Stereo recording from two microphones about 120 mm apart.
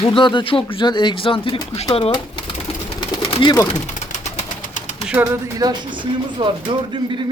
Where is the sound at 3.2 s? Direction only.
50° left (ahead or behind).